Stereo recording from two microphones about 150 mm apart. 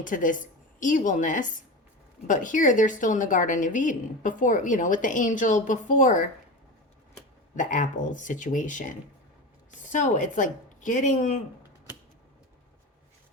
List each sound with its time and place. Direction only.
0.0 s a woman's voice: 60° left (ahead or behind)
7.5 s a woman's voice: 60° left (ahead or behind)